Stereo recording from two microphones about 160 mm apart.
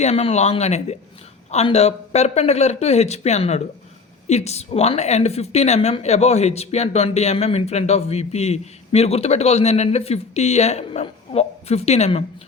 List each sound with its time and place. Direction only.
0.0 s a woman's voice: 40° left (ahead or behind)